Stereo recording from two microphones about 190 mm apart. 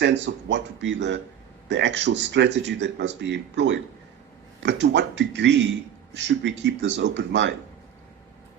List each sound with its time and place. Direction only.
0.0 s speech: 65° right (ahead or behind)